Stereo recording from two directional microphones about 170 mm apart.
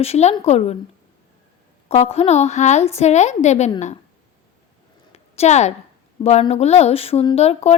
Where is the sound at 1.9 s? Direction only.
40° left (ahead or behind).